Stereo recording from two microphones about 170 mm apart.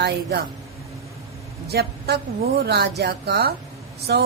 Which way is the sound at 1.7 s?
70° right (ahead or behind).